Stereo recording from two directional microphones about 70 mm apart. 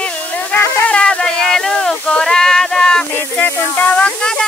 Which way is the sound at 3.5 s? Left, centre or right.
Left.